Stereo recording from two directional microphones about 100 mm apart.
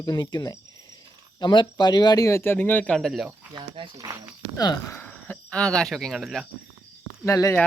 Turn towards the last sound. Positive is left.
turn(degrees=30)  # may be behind; listen again after turning